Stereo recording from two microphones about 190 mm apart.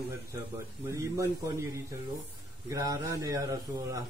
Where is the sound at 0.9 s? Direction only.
15° right (ahead or behind).